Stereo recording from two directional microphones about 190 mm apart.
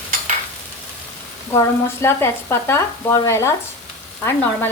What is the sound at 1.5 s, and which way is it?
Sizzle, 15° left (ahead or behind).